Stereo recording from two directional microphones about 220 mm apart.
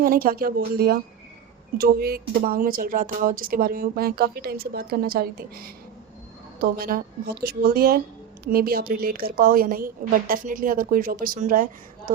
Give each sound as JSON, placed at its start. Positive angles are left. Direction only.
{"t": 0.0, "sound": "a woman's voice", "side_deg": -40}